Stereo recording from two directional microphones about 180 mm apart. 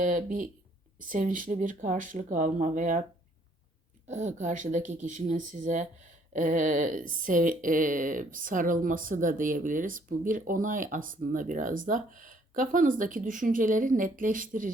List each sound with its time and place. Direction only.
0.0 s a woman's voice: 50° right (ahead or behind)
4.0 s a woman's voice: 40° right (ahead or behind)